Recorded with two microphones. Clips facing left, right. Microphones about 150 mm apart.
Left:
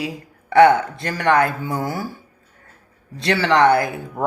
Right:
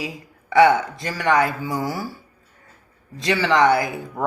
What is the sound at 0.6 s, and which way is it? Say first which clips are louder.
Speech: left 3 dB; 5° right (ahead or behind).